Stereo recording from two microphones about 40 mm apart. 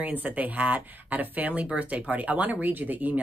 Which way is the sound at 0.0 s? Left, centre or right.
Right.